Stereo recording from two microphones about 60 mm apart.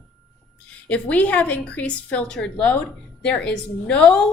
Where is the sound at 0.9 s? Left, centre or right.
Left.